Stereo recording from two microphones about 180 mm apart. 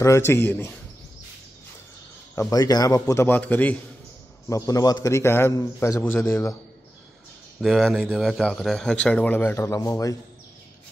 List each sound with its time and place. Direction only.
0.0 s a man's voice: 15° left (ahead or behind)
2.3 s a man's voice: 20° left (ahead or behind)
7.6 s speech: centre (ahead or behind); by 10.1 s 20° left (ahead or behind)